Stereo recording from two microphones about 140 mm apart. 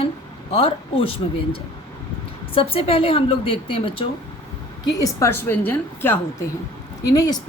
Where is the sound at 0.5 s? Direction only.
40° left (ahead or behind).